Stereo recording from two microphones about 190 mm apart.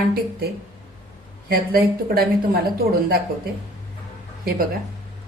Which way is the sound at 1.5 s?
50° right (ahead or behind).